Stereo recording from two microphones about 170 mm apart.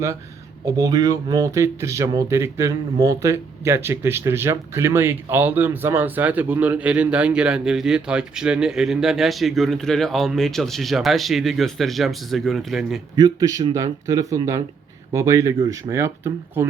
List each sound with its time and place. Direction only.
0.6 s speech: 20° right (ahead or behind); by 13.0 s centre (ahead or behind)
13.1 s a man's voice: 20° right (ahead or behind)